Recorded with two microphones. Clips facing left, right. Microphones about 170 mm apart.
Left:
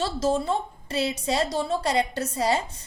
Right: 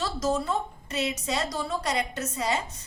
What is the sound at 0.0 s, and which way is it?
A woman's voice, 30° left (ahead or behind).